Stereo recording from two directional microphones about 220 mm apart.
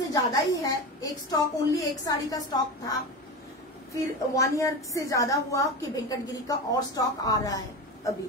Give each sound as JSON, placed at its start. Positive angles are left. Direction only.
{"t": 0.1, "sound": "a woman's voice", "side_deg": 15}
{"t": 4.4, "sound": "a woman's voice", "side_deg": 15}